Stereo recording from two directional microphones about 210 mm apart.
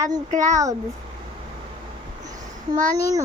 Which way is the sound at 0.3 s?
35° right (ahead or behind).